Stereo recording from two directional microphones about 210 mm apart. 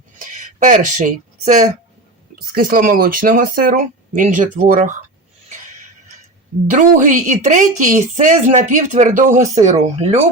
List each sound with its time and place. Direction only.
0.3 s a sound: 40° right (ahead or behind)
1.0 s speech: 40° right (ahead or behind)
6.7 s speech: 35° right (ahead or behind)